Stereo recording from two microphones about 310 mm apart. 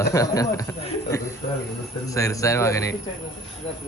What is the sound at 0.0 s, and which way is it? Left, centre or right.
Speech, centre.